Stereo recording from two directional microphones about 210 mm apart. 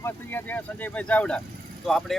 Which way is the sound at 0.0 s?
10° left (ahead or behind).